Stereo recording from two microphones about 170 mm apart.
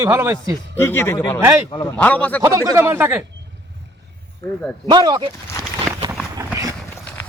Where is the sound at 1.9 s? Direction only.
10° left (ahead or behind).